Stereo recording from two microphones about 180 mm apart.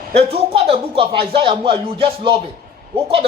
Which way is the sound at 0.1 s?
35° right (ahead or behind).